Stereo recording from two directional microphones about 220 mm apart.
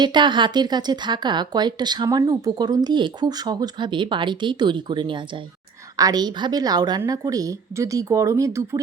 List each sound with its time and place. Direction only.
0.0 s a woman's voice: 20° right (ahead or behind)